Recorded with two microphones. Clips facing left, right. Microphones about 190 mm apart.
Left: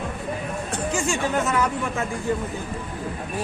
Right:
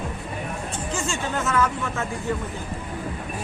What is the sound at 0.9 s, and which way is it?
Speech, 15° left (ahead or behind).